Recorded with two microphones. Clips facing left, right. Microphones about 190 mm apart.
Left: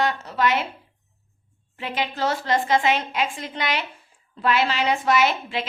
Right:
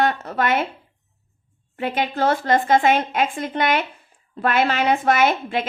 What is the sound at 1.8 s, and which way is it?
Speech, 55° right (ahead or behind).